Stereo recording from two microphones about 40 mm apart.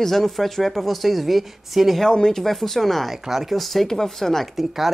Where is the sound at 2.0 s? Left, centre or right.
Centre.